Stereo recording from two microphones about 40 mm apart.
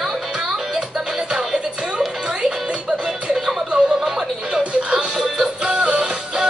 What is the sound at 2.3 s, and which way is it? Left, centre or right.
Music, right.